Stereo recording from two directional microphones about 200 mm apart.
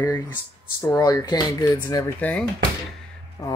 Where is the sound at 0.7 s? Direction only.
15° left (ahead or behind).